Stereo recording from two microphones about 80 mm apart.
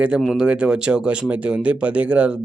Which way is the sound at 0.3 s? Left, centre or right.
Centre.